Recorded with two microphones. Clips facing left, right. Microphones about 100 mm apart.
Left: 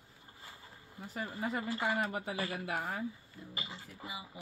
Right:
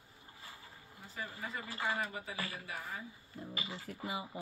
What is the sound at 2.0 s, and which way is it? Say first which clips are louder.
Speech: left 5 dB; 65° left (ahead or behind).